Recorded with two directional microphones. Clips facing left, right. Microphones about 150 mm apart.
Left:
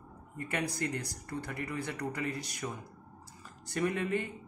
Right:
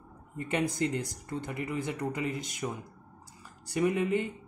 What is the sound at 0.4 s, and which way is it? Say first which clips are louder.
Speech: right 5 dB; 25° right (ahead or behind).